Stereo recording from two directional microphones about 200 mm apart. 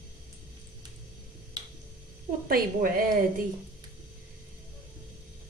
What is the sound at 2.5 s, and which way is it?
Speech, 45° right (ahead or behind).